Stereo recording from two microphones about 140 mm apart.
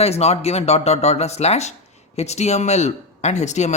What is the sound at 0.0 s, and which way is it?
Speech, 50° left (ahead or behind).